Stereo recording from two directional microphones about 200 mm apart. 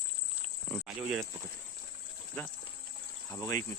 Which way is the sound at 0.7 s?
5° right (ahead or behind).